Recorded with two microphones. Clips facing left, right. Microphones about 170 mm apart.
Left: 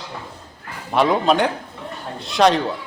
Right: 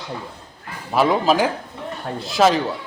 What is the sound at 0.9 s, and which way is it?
A man's voice, centre (ahead or behind).